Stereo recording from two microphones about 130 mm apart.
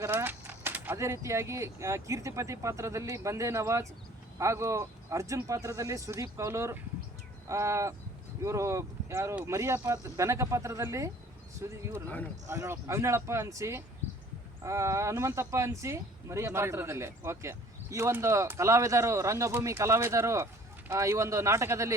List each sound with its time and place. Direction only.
0.0 s speech: 20° right (ahead or behind)
12.5 s speech: 20° right (ahead or behind)